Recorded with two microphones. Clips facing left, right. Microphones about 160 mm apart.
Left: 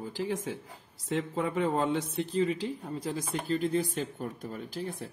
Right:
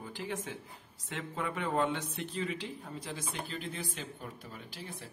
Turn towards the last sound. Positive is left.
turn(degrees=45)  # may be behind; listen again after turning